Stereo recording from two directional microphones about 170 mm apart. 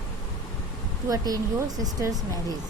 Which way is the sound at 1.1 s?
20° right (ahead or behind).